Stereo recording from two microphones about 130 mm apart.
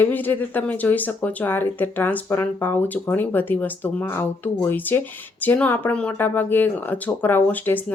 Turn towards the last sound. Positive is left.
turn(degrees=15)  # may be behind; listen again after turning